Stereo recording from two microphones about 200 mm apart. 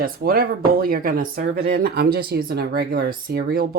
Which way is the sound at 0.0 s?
45° right (ahead or behind).